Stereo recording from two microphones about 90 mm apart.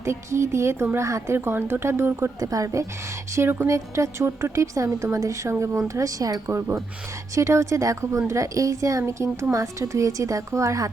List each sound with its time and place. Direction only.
0.0 s speech: 30° right (ahead or behind)
2.4 s speech: 40° right (ahead or behind)
3.3 s speech: 25° right (ahead or behind)